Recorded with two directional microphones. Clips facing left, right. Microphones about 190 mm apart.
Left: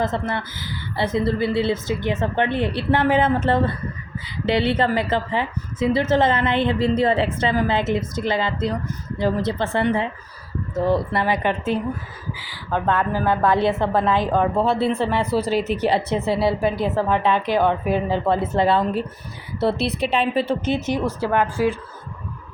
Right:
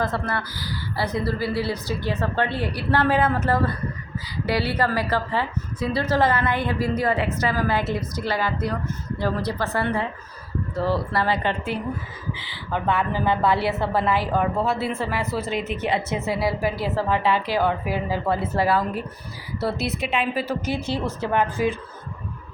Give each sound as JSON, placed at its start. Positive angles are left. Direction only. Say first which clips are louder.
{"t": 0.0, "sound": "a woman's voice", "louder": "left 2 dB", "side_deg": 20}
{"t": 12.5, "sound": "speech", "louder": "left 3 dB", "side_deg": -15}
{"t": 13.3, "sound": "a woman's voice", "louder": "left 4 dB", "side_deg": 15}
{"t": 15.0, "sound": "a woman's voice", "louder": "left 5 dB", "side_deg": 30}